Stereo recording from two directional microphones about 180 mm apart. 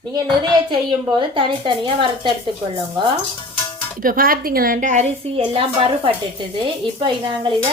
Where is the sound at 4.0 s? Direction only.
50° right (ahead or behind).